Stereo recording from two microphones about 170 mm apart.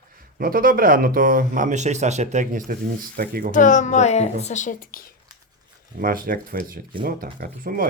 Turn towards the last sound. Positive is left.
turn(degrees=-60)  # may be behind; listen again after turning